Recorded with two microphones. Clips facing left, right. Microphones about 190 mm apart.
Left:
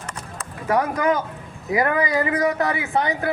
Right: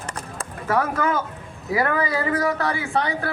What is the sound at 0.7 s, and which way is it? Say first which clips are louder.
Speech: left 2 dB; 15° left (ahead or behind).